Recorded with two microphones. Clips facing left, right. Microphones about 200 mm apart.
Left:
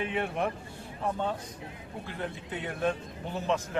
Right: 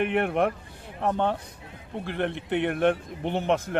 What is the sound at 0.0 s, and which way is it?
A man's voice, 65° right (ahead or behind).